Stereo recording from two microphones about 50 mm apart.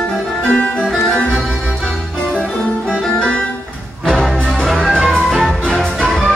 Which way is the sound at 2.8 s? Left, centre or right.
Centre.